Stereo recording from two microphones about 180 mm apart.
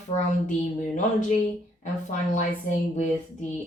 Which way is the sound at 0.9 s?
40° left (ahead or behind).